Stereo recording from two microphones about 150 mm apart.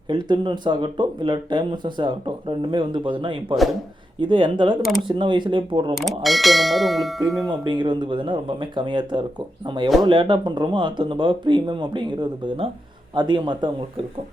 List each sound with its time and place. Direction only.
0.1 s speech: 30° right (ahead or behind)
5.9 s bell: centre (ahead or behind)
7.4 s speech: 30° right (ahead or behind)